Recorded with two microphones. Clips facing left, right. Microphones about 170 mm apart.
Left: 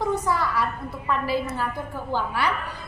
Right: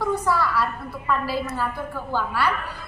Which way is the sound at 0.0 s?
20° left (ahead or behind).